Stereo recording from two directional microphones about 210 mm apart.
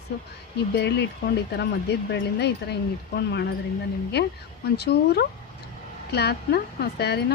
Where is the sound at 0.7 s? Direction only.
55° left (ahead or behind).